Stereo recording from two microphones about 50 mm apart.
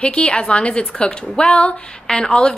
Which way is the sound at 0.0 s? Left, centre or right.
Left.